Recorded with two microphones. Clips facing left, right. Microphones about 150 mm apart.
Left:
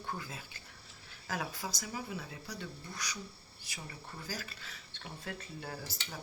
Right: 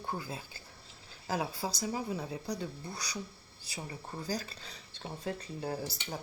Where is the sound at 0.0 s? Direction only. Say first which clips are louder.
Right 3 dB; 30° right (ahead or behind).